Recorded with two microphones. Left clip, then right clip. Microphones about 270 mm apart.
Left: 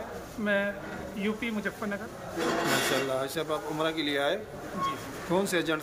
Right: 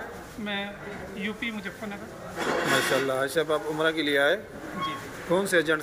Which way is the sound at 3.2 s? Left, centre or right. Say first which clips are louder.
Right 6 dB; centre.